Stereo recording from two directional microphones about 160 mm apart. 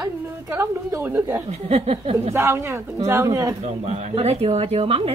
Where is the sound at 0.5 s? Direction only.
15° right (ahead or behind).